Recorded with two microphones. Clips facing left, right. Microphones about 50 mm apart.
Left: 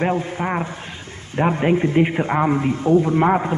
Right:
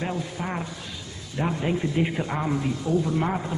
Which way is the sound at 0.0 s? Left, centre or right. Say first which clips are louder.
Left 9 dB; left.